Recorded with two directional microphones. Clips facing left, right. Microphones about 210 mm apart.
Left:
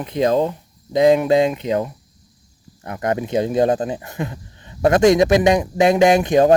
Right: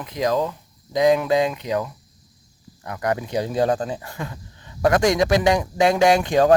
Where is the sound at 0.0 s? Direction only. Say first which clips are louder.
Left 5 dB; 25° left (ahead or behind).